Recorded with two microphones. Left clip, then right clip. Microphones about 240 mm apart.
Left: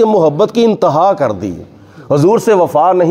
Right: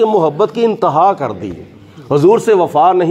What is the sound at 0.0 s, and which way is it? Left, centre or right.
A man's voice, left.